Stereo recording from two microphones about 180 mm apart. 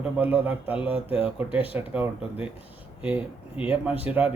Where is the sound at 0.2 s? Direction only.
10° right (ahead or behind).